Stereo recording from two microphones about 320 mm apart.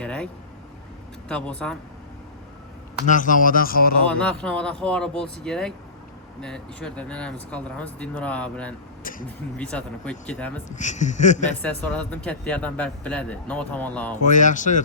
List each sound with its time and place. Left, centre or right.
0.0 s speech: centre
1.3 s speech: centre
3.1 s speech: left
4.1 s speech: centre
9.0 s a sound: left
9.6 s speech: centre
10.7 s speech: left
11.6 s speech: centre
14.3 s speech: left